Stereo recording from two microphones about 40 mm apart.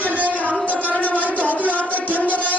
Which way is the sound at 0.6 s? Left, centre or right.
Right.